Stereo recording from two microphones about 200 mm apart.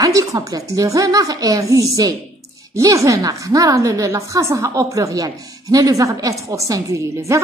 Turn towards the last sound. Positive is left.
turn(degrees=-15)  # may be behind; listen again after turning